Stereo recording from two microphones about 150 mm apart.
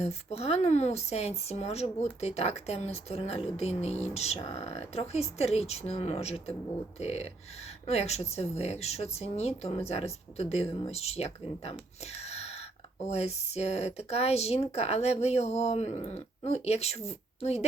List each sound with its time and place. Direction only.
0.0 s speech: 45° left (ahead or behind)
12.2 s a sound: 45° left (ahead or behind)
13.1 s a woman's voice: 45° left (ahead or behind)